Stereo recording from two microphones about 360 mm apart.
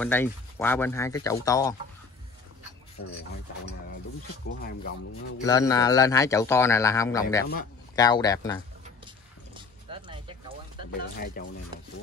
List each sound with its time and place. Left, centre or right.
0.0 s a man's voice: centre
3.0 s filing: left
4.5 s speech: left
5.4 s a man's voice: centre
9.0 s horse: centre
10.9 s speech: left